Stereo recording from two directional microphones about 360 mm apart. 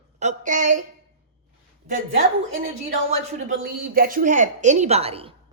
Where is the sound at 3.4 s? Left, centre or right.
Right.